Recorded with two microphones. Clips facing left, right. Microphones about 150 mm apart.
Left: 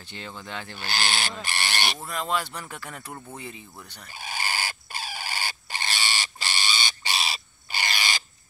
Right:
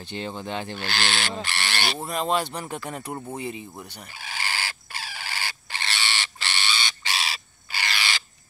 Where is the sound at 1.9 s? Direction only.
25° right (ahead or behind).